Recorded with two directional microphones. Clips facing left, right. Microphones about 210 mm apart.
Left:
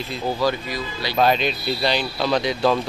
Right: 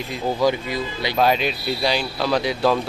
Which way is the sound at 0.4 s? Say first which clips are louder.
Right 4 dB; 20° right (ahead or behind).